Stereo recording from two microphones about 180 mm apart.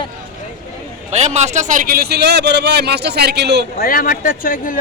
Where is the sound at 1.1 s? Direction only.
40° right (ahead or behind); by 3.7 s 70° right (ahead or behind).